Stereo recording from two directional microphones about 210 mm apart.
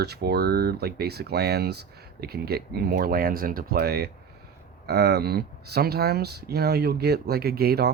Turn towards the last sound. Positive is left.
turn(degrees=-45)  # may be behind; listen again after turning